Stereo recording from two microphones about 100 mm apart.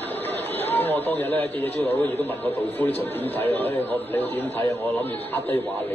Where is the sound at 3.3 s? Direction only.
20° left (ahead or behind).